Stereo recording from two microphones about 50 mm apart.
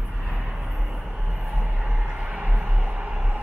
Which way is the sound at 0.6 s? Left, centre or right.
Centre.